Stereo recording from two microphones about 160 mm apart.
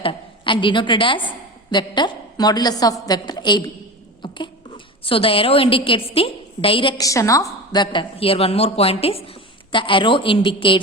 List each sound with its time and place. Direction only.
0.0 s a woman's voice: 35° left (ahead or behind)
4.2 s a sound: 30° left (ahead or behind)
5.0 s a woman's voice: 35° left (ahead or behind)